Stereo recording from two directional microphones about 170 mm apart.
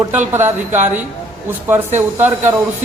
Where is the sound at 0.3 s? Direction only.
15° right (ahead or behind).